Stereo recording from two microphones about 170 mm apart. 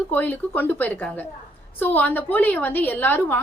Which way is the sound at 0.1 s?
10° left (ahead or behind).